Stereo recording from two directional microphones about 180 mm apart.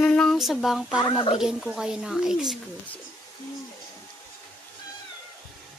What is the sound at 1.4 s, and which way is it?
Speech, 5° right (ahead or behind).